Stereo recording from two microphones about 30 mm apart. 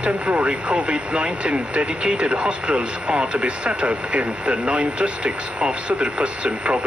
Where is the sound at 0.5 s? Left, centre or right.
Right.